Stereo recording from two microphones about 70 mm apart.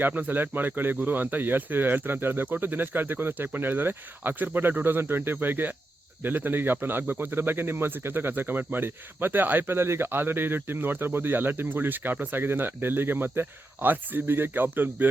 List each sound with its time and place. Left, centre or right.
0.0 s speech: right